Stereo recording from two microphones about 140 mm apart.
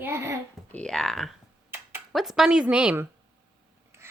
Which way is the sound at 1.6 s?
15° right (ahead or behind).